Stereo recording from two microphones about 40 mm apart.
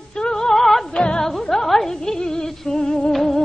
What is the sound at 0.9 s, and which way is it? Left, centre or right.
Music, left.